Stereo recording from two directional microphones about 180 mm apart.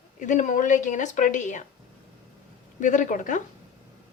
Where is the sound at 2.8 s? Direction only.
45° left (ahead or behind).